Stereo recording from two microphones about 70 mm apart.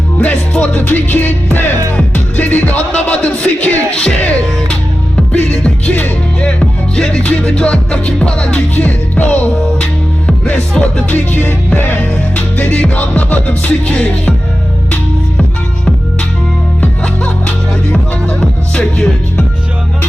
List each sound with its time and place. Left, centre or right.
0.2 s music: left
6.4 s music: centre
17.9 s music: centre